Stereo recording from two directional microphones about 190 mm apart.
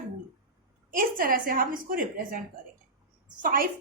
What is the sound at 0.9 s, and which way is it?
A woman's voice, 50° right (ahead or behind).